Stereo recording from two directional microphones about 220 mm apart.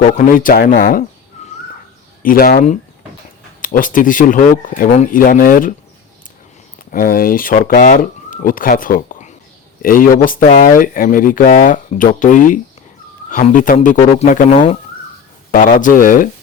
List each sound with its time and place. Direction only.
0.2 s speech: 40° left (ahead or behind)
1.4 s a sound: 30° left (ahead or behind)
2.2 s speech: 40° left (ahead or behind)
6.9 s speech: 40° left (ahead or behind)